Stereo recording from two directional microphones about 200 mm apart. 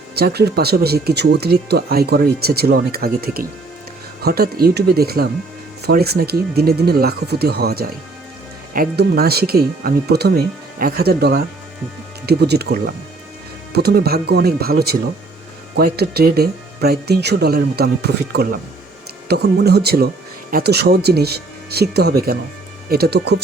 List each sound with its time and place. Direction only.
0.2 s speech: 55° right (ahead or behind)